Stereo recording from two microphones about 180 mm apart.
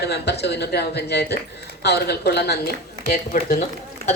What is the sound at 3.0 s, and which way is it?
Speech, 50° left (ahead or behind).